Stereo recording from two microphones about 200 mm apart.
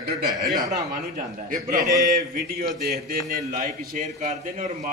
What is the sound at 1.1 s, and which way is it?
Speech, 40° right (ahead or behind).